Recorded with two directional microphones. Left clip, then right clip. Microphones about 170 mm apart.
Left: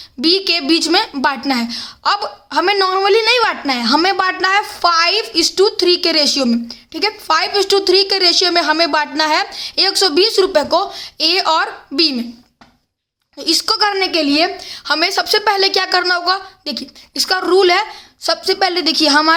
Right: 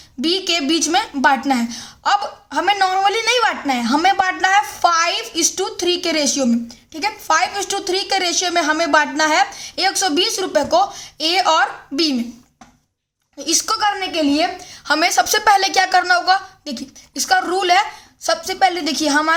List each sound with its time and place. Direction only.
0.2 s a woman's voice: 35° left (ahead or behind)
13.4 s a woman's voice: 35° left (ahead or behind)
14.8 s a woman's voice: 25° left (ahead or behind)